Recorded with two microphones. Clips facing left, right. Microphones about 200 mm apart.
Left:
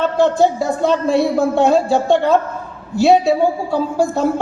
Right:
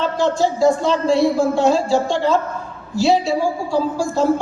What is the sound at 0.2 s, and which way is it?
A man's voice, 60° left (ahead or behind).